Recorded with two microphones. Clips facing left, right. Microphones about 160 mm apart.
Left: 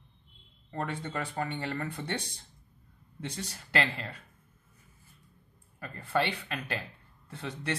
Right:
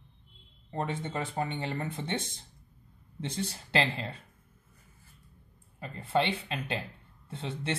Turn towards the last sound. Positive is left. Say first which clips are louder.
# right 1 dB
turn(degrees=-25)  # may be behind; listen again after turning